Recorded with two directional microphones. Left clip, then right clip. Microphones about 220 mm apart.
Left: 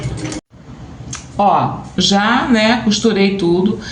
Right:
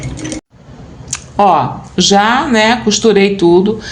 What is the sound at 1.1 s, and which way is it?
Speech, 55° right (ahead or behind).